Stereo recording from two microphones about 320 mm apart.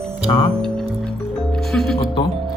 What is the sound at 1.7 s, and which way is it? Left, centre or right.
Speech, centre.